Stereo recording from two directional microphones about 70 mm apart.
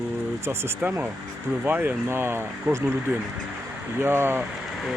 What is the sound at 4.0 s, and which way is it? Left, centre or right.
Speech, right.